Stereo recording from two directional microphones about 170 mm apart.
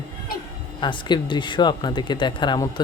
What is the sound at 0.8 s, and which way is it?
Speech, 25° left (ahead or behind).